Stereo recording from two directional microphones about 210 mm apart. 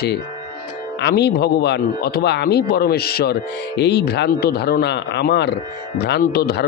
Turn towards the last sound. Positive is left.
turn(degrees=50)  # may be behind; listen again after turning